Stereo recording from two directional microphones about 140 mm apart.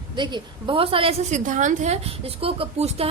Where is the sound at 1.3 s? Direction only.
65° right (ahead or behind); by 3.1 s 45° right (ahead or behind).